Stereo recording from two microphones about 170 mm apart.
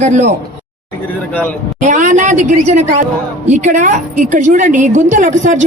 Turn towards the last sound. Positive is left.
turn(degrees=-45)  # may be behind; listen again after turning